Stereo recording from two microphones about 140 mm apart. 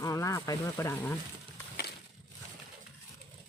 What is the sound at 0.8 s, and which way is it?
Speech, 15° left (ahead or behind).